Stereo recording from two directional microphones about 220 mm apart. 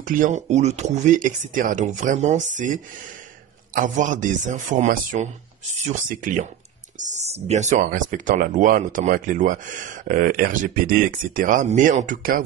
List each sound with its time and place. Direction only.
0.0 s speech: 35° right (ahead or behind)
7.4 s speech: 30° right (ahead or behind)